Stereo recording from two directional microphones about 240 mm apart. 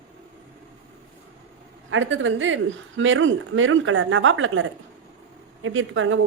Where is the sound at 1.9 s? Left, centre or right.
Right.